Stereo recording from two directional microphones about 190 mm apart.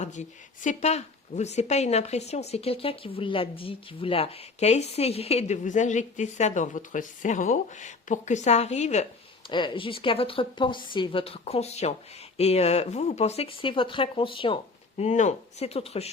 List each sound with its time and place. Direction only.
0.0 s speech: 40° left (ahead or behind)
9.5 s a woman's voice: 25° left (ahead or behind)